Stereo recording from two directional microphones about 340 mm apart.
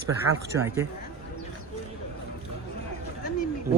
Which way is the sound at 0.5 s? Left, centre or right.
Right.